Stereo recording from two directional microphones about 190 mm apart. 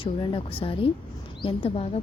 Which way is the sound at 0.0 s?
25° left (ahead or behind).